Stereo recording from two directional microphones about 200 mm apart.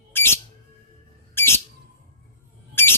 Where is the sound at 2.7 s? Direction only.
10° left (ahead or behind).